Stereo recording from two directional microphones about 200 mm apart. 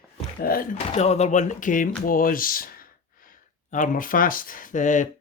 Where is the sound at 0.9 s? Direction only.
35° left (ahead or behind).